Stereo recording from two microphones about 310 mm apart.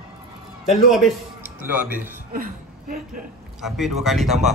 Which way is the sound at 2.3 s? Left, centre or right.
Right.